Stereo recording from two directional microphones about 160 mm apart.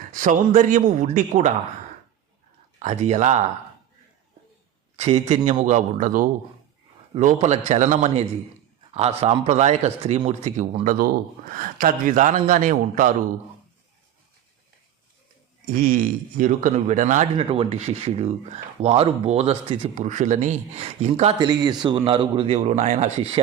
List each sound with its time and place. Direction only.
0.0 s speech: 55° right (ahead or behind)
2.7 s speech: 45° right (ahead or behind)
4.9 s a man's voice: 40° right (ahead or behind)
15.6 s speech: 60° right (ahead or behind)
17.3 s speech: 35° right (ahead or behind)
21.3 s speech: 25° right (ahead or behind)